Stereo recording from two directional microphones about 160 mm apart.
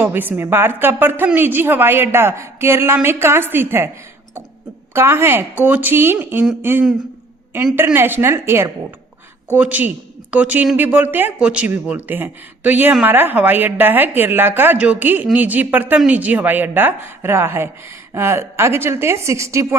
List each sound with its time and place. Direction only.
0.0 s speech: 10° right (ahead or behind)
4.9 s speech: 15° right (ahead or behind)